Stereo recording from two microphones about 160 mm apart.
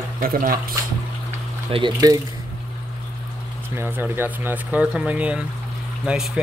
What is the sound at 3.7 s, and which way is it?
Speech, 15° right (ahead or behind).